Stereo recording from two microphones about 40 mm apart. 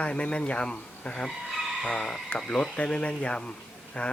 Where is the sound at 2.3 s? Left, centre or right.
Left.